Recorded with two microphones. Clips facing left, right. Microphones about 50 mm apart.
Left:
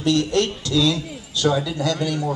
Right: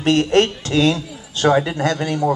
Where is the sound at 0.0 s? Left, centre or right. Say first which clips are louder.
Right 4 dB; right.